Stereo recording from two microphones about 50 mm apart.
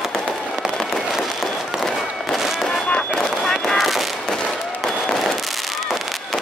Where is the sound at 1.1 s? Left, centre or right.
Centre.